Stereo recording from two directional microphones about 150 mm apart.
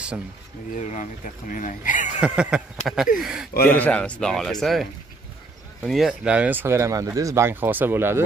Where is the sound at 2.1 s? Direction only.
5° right (ahead or behind).